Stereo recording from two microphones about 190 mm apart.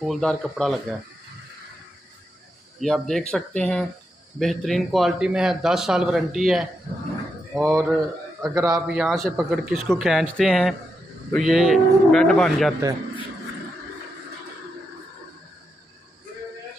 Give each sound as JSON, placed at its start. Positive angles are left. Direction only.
{"t": 0.0, "sound": "a man's voice", "side_deg": 0}
{"t": 2.8, "sound": "a man's voice", "side_deg": 0}
{"t": 8.8, "sound": "a man's voice", "side_deg": -5}